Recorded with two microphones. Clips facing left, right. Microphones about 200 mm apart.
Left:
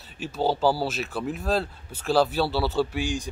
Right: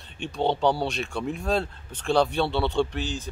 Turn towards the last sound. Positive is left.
turn(degrees=10)  # may be behind; listen again after turning